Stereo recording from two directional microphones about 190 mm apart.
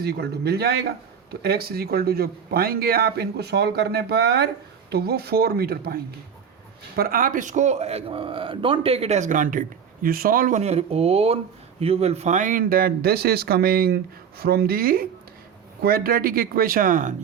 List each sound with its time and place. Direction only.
0.0 s a man's voice: 55° right (ahead or behind)